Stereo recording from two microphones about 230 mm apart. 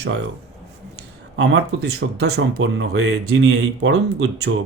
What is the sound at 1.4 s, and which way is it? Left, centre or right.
Speech, right.